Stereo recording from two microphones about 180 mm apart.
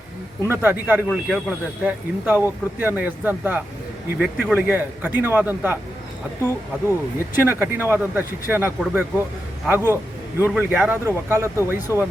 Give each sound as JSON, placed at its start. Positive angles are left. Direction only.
{"t": 0.4, "sound": "speech", "side_deg": -15}
{"t": 7.3, "sound": "speech", "side_deg": -10}